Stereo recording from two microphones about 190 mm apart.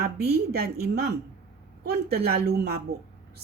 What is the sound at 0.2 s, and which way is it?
A woman's voice, 55° right (ahead or behind).